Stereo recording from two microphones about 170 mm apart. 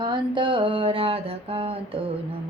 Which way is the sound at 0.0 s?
30° right (ahead or behind).